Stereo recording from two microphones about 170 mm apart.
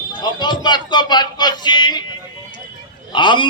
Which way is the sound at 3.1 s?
25° left (ahead or behind).